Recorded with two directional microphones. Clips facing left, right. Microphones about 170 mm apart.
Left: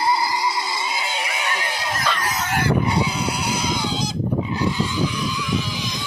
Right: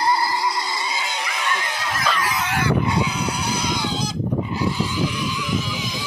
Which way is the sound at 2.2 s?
40° left (ahead or behind).